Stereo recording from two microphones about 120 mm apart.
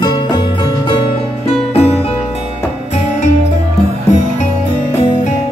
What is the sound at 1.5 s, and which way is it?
Music, 60° left (ahead or behind).